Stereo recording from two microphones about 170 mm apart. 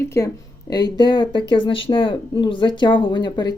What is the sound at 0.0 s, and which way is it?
Speech, 15° left (ahead or behind).